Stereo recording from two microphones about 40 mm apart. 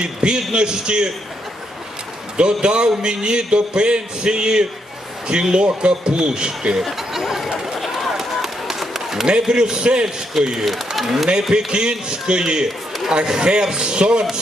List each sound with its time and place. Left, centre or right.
0.0 s a man's voice: right
2.4 s a man's voice: right
6.7 s speech: centre
8.1 s run: centre
9.5 s a man's voice: centre
10.7 s speech: centre
11.5 s a man's voice: right